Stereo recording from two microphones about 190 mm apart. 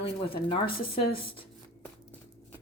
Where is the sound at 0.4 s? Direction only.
25° left (ahead or behind).